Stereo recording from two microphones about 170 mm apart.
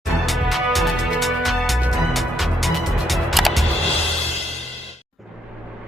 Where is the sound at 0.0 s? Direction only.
Centre (ahead or behind).